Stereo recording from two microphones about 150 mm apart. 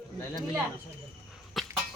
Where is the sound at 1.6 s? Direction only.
Centre (ahead or behind).